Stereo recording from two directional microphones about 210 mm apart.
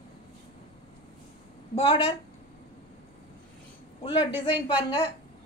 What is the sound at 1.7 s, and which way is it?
Speech, 25° left (ahead or behind).